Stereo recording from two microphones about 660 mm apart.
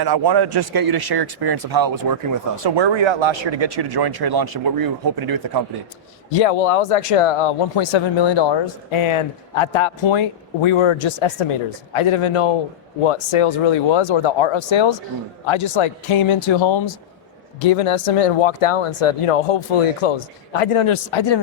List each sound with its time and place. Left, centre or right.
0.0 s speech: right
6.3 s speech: left
17.6 s speech: left